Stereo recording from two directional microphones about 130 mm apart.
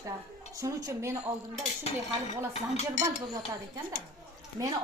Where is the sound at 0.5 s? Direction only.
25° right (ahead or behind).